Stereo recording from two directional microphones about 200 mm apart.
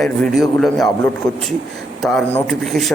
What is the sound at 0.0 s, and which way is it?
Speech, centre (ahead or behind).